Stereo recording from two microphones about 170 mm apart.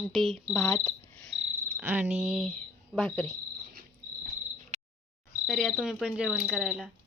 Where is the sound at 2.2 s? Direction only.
Centre (ahead or behind).